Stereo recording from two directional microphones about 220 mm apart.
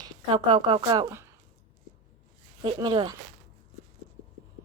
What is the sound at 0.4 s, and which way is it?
Speech, 20° right (ahead or behind).